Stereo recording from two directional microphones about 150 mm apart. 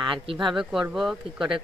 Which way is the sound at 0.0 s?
35° right (ahead or behind).